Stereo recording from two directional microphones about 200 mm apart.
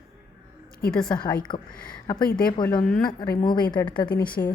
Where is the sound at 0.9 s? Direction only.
5° left (ahead or behind).